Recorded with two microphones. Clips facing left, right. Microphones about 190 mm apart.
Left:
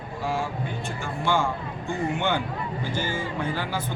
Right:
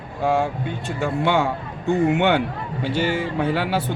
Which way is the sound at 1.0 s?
65° right (ahead or behind).